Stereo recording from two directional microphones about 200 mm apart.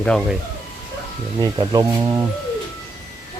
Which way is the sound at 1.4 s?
20° right (ahead or behind).